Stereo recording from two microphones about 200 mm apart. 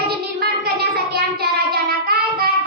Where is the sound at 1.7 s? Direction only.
50° right (ahead or behind).